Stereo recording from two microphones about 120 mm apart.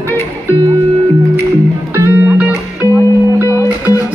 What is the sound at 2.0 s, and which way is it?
Music, 15° right (ahead or behind).